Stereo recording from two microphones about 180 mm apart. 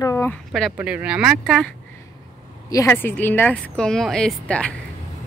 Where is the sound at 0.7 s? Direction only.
5° right (ahead or behind).